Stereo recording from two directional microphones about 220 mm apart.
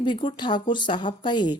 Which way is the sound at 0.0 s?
20° left (ahead or behind).